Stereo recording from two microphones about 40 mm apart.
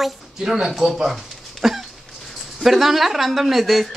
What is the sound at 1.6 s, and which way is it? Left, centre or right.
A child's voice, centre.